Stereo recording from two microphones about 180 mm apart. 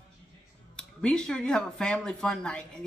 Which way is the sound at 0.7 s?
5° left (ahead or behind).